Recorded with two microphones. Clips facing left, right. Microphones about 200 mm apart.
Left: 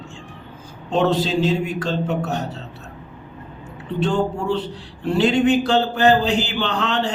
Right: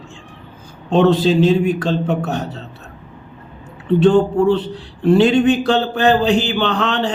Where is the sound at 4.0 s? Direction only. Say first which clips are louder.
Right 8 dB; 55° right (ahead or behind).